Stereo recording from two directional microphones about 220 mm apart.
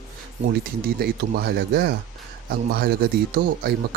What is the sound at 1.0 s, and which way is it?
Speech, 45° right (ahead or behind).